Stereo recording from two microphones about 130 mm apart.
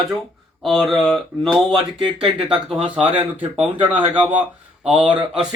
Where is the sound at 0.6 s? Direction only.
Centre (ahead or behind).